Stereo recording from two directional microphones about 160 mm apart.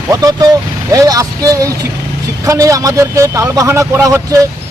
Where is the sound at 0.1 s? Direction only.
25° right (ahead or behind).